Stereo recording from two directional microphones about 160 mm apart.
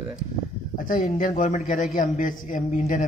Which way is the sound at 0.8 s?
55° left (ahead or behind).